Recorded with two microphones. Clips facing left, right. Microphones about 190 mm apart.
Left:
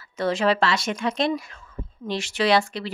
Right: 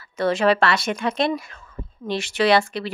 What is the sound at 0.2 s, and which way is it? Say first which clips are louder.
Speech: right 3 dB; 60° right (ahead or behind).